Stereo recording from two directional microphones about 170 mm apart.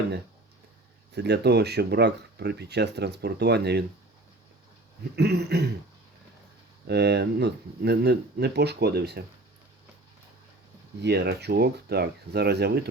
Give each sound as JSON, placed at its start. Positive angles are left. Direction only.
{"t": 1.1, "sound": "speech", "side_deg": -80}
{"t": 5.1, "sound": "speech", "side_deg": -75}
{"t": 6.8, "sound": "speech", "side_deg": -80}
{"t": 11.0, "sound": "speech", "side_deg": -75}